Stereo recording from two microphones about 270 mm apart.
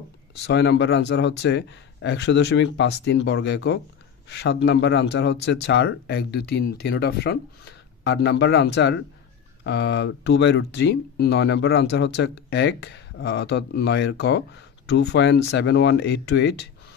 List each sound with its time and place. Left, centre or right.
0.5 s speech: left